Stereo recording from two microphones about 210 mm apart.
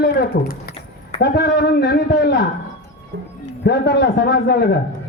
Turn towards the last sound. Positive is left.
turn(degrees=50)  # may be behind; listen again after turning